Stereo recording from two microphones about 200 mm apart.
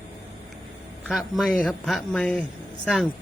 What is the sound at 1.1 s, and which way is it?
A woman's voice, centre (ahead or behind).